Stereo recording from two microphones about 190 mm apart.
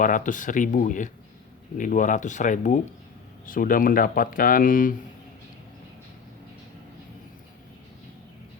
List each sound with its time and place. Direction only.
0.0 s speech: 45° left (ahead or behind)